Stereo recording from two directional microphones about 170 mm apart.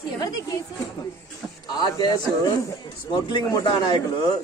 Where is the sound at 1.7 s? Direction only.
25° left (ahead or behind).